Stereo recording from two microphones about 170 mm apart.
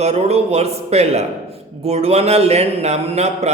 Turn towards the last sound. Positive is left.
turn(degrees=-40)  # may be behind; listen again after turning